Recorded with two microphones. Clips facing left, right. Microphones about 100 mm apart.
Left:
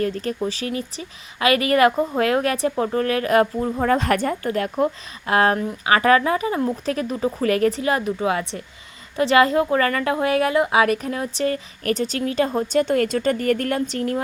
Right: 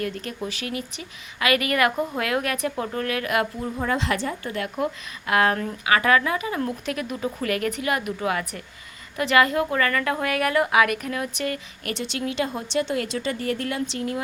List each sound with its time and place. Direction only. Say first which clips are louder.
0.0 s a woman's voice: left 6 dB; 35° left (ahead or behind)